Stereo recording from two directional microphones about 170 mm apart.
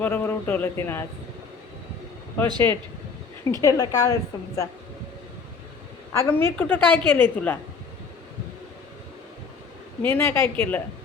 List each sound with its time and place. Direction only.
0.0 s a woman's voice: 10° left (ahead or behind)
2.6 s a woman's voice: 15° left (ahead or behind)
6.1 s a woman's voice: 15° left (ahead or behind)
10.0 s a woman's voice: 10° left (ahead or behind)